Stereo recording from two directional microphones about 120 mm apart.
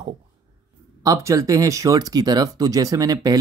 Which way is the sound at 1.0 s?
25° right (ahead or behind).